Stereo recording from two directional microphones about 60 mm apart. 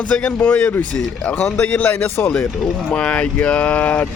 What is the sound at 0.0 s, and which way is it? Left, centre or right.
Speech, left.